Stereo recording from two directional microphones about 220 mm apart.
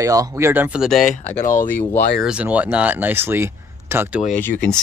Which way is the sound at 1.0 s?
35° left (ahead or behind).